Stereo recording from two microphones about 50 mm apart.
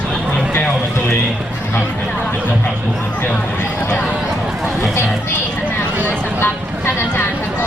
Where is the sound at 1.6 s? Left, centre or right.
Left.